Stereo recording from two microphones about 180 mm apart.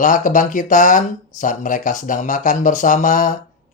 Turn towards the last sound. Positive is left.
turn(degrees=45)  # may be behind; listen again after turning